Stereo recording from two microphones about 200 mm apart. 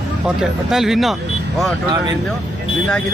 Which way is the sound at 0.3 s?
Centre (ahead or behind).